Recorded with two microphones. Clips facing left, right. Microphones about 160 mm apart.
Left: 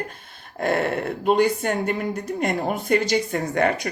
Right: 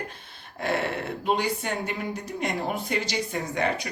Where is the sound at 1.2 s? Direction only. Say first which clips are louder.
Left 7 dB; 50° left (ahead or behind).